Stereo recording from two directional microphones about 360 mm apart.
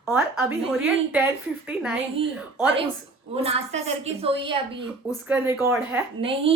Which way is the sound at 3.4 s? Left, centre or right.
Centre.